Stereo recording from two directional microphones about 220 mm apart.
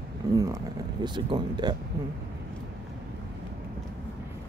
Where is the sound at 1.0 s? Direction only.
20° right (ahead or behind).